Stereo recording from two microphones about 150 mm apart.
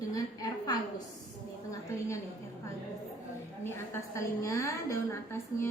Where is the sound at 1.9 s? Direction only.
20° left (ahead or behind).